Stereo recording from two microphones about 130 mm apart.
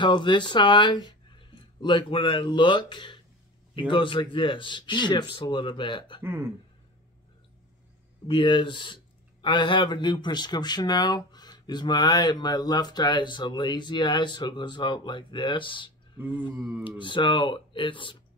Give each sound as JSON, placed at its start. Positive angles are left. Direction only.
{"t": 0.0, "sound": "speech", "side_deg": 35}
{"t": 6.2, "sound": "speech", "side_deg": -20}
{"t": 8.3, "sound": "speech", "side_deg": 40}
{"t": 16.2, "sound": "mantra", "side_deg": -15}
{"t": 17.0, "sound": "speech", "side_deg": 40}